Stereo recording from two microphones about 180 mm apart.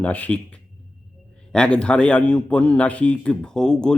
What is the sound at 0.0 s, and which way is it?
A man's voice, 10° left (ahead or behind).